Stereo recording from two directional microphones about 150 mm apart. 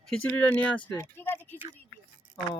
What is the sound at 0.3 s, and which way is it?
Speech, 10° left (ahead or behind).